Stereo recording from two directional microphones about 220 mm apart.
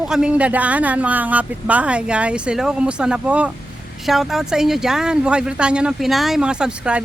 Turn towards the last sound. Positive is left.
turn(degrees=-5)  # may be behind; listen again after turning